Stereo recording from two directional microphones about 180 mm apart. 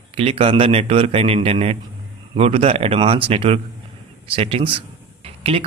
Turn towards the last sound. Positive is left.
turn(degrees=-30)  # may be behind; listen again after turning